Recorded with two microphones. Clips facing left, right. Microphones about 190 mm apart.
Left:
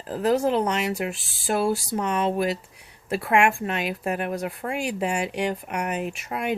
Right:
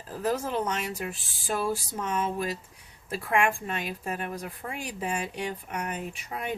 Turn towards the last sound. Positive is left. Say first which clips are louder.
# left 6 dB
turn(degrees=70)  # may be behind; listen again after turning